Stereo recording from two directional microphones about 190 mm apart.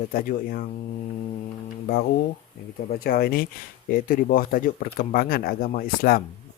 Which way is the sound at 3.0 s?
50° left (ahead or behind).